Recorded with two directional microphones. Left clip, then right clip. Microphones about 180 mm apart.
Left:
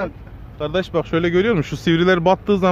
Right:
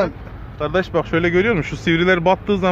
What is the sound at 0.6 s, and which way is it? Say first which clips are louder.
Speech: right 2 dB; 55° left (ahead or behind).